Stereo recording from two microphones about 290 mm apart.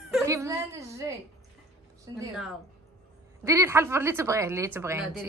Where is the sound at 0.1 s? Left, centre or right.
Centre.